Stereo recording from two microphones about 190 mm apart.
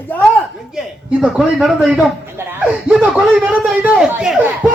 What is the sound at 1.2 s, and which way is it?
Speech, 5° right (ahead or behind).